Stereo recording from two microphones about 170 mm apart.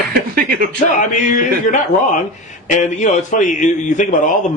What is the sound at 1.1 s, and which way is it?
A man's voice, 45° left (ahead or behind).